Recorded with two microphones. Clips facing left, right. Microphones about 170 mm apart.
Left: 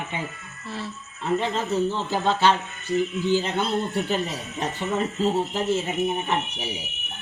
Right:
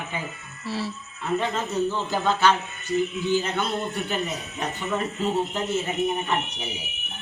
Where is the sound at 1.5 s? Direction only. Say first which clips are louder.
Left 1 dB; 30° left (ahead or behind).